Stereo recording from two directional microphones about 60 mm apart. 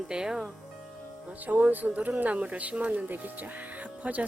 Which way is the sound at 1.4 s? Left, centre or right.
Right.